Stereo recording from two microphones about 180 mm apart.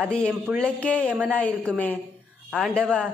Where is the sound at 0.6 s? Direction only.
5° left (ahead or behind).